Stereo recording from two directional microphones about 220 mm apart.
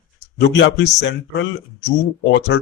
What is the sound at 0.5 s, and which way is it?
Speech, 55° left (ahead or behind).